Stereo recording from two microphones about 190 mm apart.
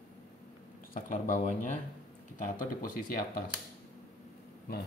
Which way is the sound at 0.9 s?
45° left (ahead or behind).